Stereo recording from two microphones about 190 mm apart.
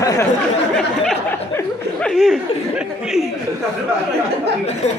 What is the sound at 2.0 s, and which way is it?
Chuckle, centre (ahead or behind).